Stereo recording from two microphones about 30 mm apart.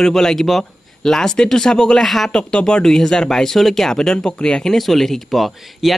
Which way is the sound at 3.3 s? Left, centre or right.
Centre.